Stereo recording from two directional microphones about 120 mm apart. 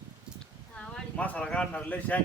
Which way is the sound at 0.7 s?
10° left (ahead or behind).